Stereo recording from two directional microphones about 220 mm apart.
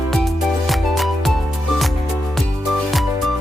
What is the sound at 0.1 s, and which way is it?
Music, centre (ahead or behind).